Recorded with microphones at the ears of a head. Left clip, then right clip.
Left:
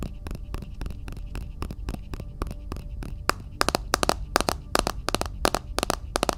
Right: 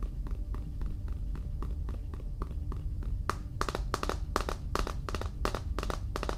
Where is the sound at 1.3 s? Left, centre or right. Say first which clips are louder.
Left 8 dB; left.